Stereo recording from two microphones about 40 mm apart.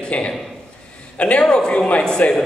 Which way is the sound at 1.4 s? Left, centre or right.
Left.